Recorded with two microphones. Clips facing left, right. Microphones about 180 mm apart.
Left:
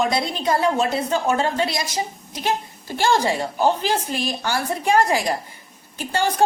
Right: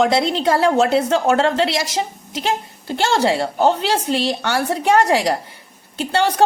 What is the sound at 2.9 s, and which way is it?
A woman's voice, 75° right (ahead or behind).